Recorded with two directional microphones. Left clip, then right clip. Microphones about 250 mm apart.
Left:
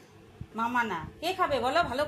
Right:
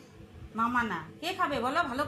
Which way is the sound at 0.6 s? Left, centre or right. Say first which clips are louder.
Even; left.